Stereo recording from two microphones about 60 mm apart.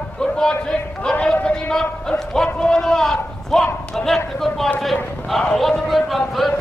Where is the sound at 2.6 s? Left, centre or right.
Centre.